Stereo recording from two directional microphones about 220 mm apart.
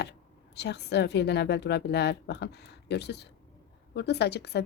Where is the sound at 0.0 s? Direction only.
50° left (ahead or behind).